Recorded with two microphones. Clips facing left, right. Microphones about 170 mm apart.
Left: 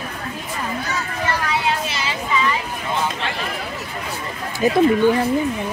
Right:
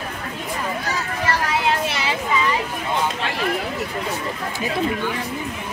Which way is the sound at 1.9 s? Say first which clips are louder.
Right 2 dB; 60° right (ahead or behind).